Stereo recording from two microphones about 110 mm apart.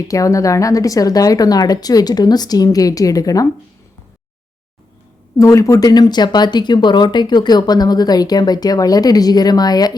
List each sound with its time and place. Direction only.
0.1 s speech: 30° left (ahead or behind)
5.4 s speech: 30° left (ahead or behind)